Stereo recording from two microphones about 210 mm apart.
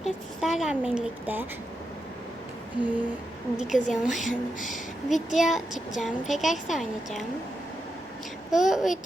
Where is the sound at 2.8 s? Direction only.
10° right (ahead or behind).